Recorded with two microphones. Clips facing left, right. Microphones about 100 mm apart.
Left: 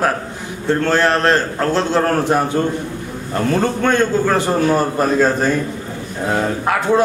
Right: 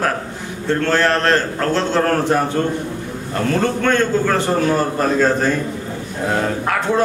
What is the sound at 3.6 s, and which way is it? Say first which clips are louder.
A man's voice: even; 15° left (ahead or behind).